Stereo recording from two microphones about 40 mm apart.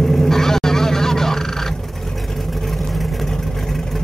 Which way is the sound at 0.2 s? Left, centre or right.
Centre.